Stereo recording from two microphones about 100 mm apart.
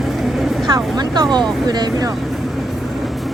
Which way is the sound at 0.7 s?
45° right (ahead or behind).